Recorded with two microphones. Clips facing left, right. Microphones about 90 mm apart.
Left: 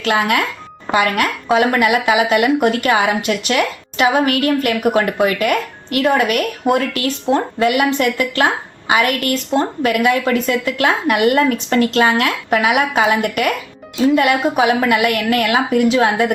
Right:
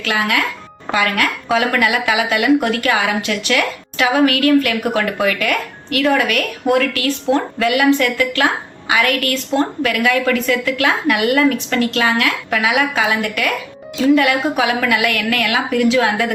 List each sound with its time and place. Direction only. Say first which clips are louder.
0.0 s a woman's voice: left 2 dB; 30° left (ahead or behind)